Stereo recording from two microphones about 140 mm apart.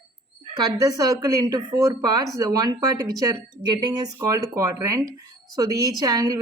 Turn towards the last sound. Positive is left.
turn(degrees=-25)  # may be behind; listen again after turning